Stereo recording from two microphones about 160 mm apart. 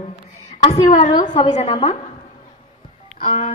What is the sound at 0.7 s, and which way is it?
A woman's voice, 45° left (ahead or behind).